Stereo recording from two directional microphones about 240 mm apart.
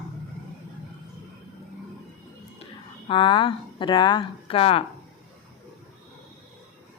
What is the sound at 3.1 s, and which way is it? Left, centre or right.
Speech, left.